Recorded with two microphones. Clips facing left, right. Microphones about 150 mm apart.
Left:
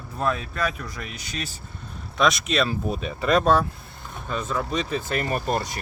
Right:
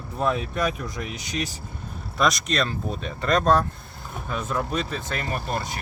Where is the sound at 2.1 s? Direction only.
Centre (ahead or behind).